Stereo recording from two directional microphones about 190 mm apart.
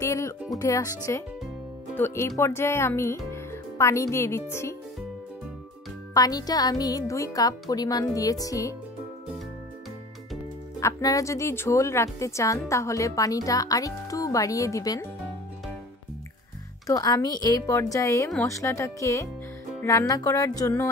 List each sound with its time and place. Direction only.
0.0 s music: 15° left (ahead or behind)
0.6 s speech: 15° left (ahead or behind)
6.1 s speech: 20° left (ahead or behind)
10.8 s speech: 15° left (ahead or behind)
16.8 s speech: 20° left (ahead or behind)